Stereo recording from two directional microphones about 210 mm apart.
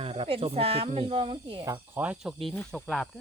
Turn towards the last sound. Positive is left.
turn(degrees=0)  # may be behind; listen again after turning